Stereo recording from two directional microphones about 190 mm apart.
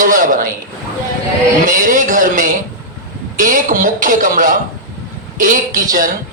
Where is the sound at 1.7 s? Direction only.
45° right (ahead or behind).